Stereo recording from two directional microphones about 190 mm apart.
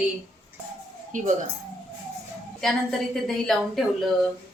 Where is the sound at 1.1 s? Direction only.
40° right (ahead or behind).